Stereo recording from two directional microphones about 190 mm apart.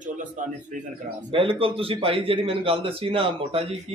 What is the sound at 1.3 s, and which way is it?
A man's voice, 30° right (ahead or behind).